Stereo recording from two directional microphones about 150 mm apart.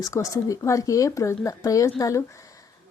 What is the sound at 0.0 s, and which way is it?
Speech, 20° left (ahead or behind).